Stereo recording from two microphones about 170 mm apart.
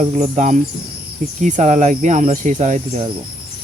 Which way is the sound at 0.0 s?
45° right (ahead or behind).